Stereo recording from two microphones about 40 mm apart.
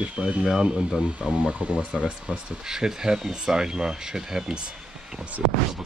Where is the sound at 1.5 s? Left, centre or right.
Right.